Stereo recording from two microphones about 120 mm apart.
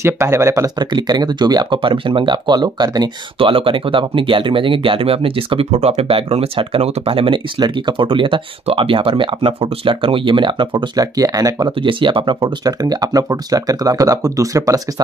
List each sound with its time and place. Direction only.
0.0 s speech: 25° right (ahead or behind)
0.7 s speech: 35° right (ahead or behind)
3.3 s speech: 50° right (ahead or behind)
11.1 s speech: 30° right (ahead or behind)